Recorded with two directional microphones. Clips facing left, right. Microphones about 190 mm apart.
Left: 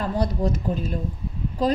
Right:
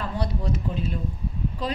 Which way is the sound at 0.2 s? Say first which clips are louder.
Left 3 dB; 40° left (ahead or behind).